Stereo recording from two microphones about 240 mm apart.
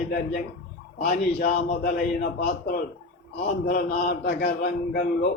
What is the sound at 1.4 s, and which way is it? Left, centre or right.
Speech, left.